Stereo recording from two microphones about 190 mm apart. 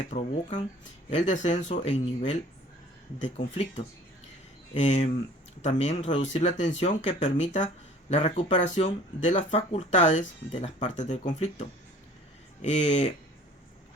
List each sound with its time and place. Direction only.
0.0 s speech: 40° left (ahead or behind)